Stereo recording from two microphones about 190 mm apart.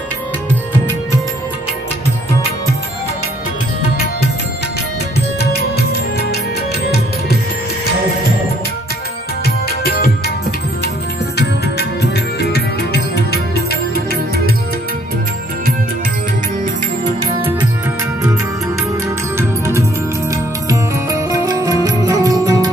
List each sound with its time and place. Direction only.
5.4 s music: 55° left (ahead or behind)
9.4 s music: 55° left (ahead or behind)
12.0 s music: 60° left (ahead or behind)
19.3 s music: 15° right (ahead or behind)